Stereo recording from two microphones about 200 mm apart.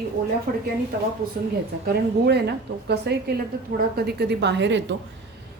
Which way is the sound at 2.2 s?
55° right (ahead or behind).